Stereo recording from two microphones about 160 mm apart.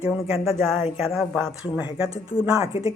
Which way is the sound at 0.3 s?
Centre (ahead or behind).